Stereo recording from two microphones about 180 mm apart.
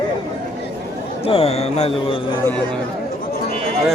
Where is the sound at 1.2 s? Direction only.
35° left (ahead or behind).